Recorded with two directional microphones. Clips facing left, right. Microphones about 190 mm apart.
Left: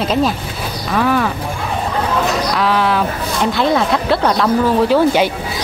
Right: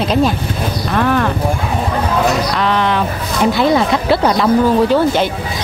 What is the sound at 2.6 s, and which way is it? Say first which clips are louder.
Speech: left 2 dB; 5° left (ahead or behind).